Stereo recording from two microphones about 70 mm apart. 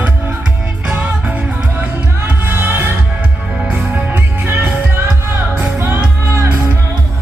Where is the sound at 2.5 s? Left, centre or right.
Right.